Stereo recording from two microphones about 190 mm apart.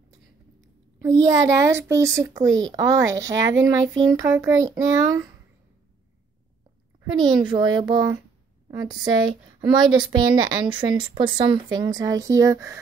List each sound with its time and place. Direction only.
1.6 s speech: 15° right (ahead or behind)
7.0 s speech: 20° right (ahead or behind)
8.6 s a sound: 20° right (ahead or behind)
9.0 s speech: 25° right (ahead or behind)